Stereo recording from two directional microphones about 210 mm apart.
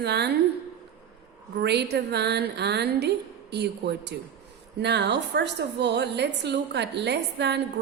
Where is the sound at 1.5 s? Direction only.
55° right (ahead or behind).